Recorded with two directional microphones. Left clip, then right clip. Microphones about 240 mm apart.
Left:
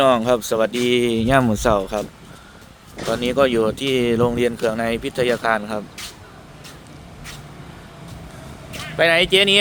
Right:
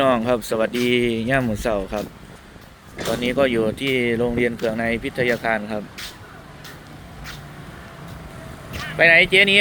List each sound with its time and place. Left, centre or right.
0.0 s speech: left
3.2 s speech: centre
8.7 s speech: centre